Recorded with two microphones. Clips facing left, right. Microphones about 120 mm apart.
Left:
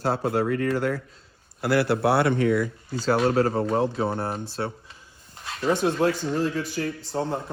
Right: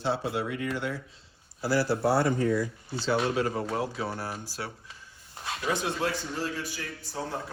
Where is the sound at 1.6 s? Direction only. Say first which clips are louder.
Left 4 dB; 60° left (ahead or behind).